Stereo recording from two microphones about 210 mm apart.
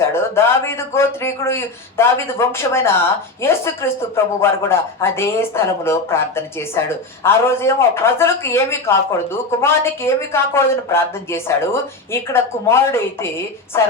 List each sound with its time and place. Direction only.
0.0 s speech: 10° left (ahead or behind)